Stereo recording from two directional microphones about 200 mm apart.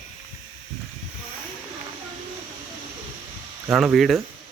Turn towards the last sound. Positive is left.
turn(degrees=0)  # may be behind; listen again after turning